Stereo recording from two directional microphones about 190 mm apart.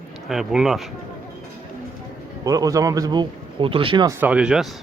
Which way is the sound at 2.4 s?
20° right (ahead or behind).